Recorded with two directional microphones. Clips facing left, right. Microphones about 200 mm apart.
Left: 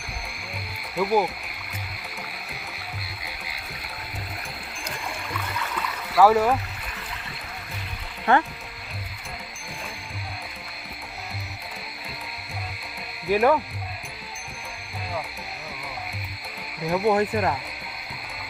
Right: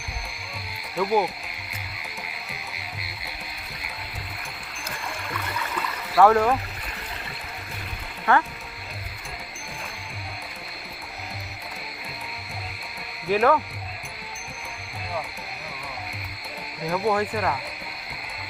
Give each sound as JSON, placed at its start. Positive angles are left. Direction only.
{"t": 0.9, "sound": "speech", "side_deg": 0}
{"t": 5.3, "sound": "stream", "side_deg": 0}
{"t": 8.3, "sound": "speech", "side_deg": 20}
{"t": 13.3, "sound": "speech", "side_deg": 15}
{"t": 16.8, "sound": "speech", "side_deg": 15}